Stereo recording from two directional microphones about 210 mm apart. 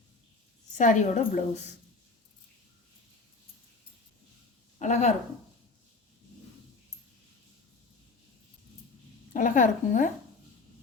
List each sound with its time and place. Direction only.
0.8 s a woman's voice: 35° left (ahead or behind)
4.8 s a woman's voice: 35° left (ahead or behind)
9.3 s a woman's voice: 40° left (ahead or behind)